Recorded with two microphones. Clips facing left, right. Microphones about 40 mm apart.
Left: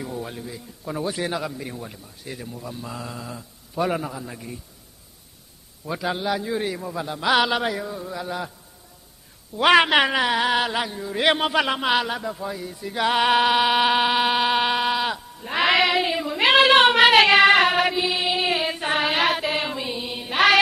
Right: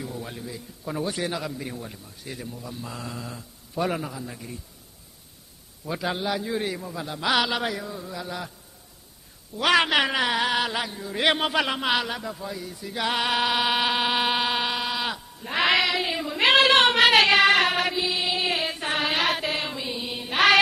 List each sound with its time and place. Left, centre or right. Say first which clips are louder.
0.0 s a sound: left 3 dB; centre
0.3 s speech: left 1 dB; centre
5.9 s a man's voice: left 2 dB; centre
9.6 s a man's voice: left 4 dB; centre
10.1 s a man's voice: left 3 dB; centre
14.6 s sheep: left 6 dB; centre
15.0 s bleat: left 4 dB; centre
15.8 s child singing: left 4 dB; centre
16.1 s child singing: left 2 dB; centre